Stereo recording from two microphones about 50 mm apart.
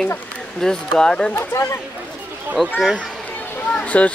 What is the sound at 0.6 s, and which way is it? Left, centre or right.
Speech, centre.